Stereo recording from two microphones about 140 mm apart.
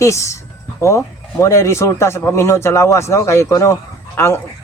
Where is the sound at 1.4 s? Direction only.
20° left (ahead or behind).